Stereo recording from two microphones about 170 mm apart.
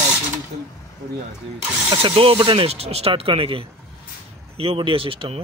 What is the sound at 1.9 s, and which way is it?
Speech, 30° right (ahead or behind).